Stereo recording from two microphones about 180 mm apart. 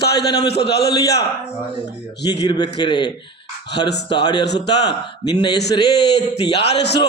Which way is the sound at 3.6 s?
70° left (ahead or behind).